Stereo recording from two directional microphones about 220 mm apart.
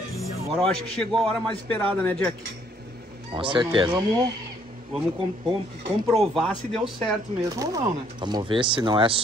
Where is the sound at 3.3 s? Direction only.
20° right (ahead or behind).